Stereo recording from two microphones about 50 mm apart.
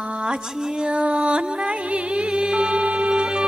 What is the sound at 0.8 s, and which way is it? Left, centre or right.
Music, centre.